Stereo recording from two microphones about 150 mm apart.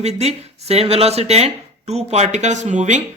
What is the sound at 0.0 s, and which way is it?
Speech, 45° right (ahead or behind).